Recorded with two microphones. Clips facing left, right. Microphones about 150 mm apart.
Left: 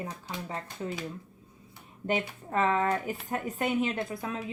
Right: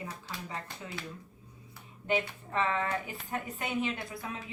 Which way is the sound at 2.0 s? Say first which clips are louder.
Left 1 dB; 45° left (ahead or behind).